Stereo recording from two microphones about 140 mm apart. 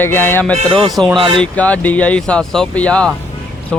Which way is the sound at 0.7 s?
35° right (ahead or behind).